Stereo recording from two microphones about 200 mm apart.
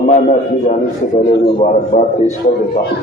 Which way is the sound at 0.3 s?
35° left (ahead or behind).